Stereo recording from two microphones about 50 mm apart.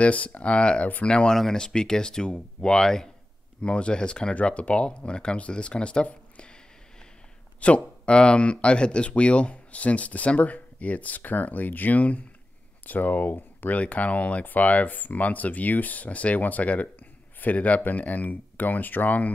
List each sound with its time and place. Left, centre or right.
0.0 s speech: left; by 3.1 s centre
3.6 s speech: left
7.6 s speech: left